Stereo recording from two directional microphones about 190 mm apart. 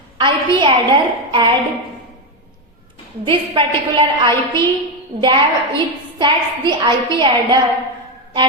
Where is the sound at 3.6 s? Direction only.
25° right (ahead or behind).